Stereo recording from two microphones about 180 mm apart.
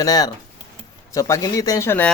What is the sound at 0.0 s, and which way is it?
A man's voice, 20° left (ahead or behind).